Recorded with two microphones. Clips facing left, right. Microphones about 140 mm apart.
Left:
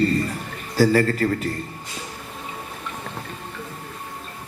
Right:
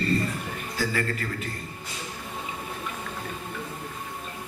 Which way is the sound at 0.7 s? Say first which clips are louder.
Left 12 dB; 40° left (ahead or behind).